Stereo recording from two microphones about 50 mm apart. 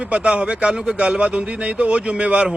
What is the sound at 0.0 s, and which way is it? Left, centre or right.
Speech, right.